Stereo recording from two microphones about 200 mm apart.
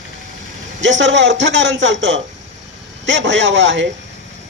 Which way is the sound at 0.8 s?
70° right (ahead or behind).